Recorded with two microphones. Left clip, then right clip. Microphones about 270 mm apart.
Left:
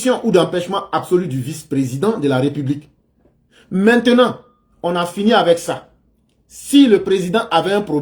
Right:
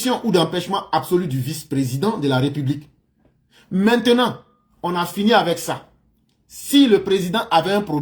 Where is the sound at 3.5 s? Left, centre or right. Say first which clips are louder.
Left 6 dB; right.